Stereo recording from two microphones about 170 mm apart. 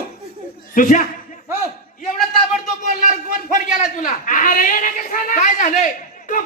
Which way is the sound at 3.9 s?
50° left (ahead or behind).